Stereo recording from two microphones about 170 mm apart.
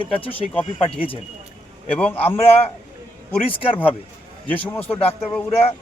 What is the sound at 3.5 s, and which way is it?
Speech, 30° left (ahead or behind).